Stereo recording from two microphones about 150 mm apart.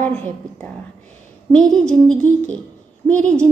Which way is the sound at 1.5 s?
5° left (ahead or behind).